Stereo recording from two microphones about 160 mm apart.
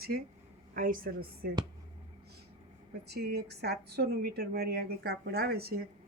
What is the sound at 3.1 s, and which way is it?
Speech, 80° right.